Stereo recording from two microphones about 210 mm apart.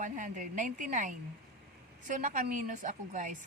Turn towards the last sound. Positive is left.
turn(degrees=-35)  # may be behind; listen again after turning